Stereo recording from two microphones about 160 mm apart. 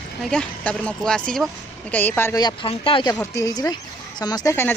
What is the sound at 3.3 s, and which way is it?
Speech, 20° left (ahead or behind).